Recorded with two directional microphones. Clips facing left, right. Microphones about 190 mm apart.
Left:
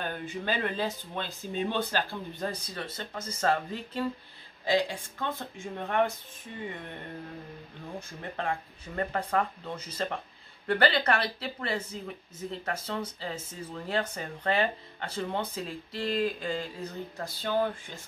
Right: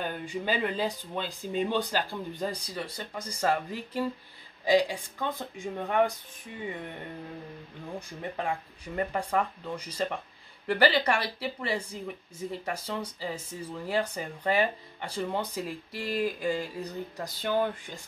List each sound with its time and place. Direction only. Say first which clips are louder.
0.0 s speech: right 1 dB; 10° right (ahead or behind)
8.2 s speech: right 1 dB; 15° right (ahead or behind)